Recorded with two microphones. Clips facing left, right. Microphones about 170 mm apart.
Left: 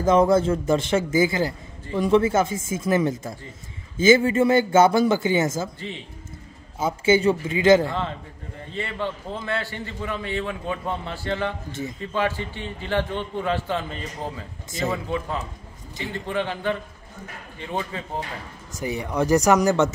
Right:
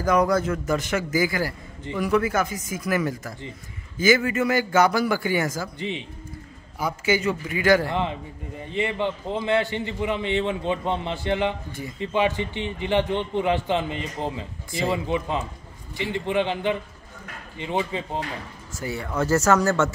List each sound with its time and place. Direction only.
0.0 s a man's voice: 25° left (ahead or behind)
5.8 s a man's voice: 20° right (ahead or behind)
6.8 s a man's voice: 25° left (ahead or behind)
7.9 s a man's voice: 15° right (ahead or behind)
18.7 s speech: 15° left (ahead or behind)